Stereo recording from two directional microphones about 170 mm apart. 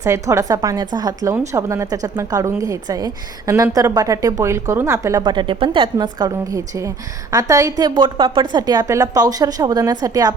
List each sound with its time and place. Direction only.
0.0 s a woman's voice: 15° right (ahead or behind)